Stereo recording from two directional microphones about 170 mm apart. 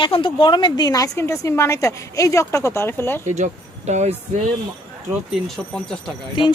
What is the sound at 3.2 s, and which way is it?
Speech, 45° right (ahead or behind).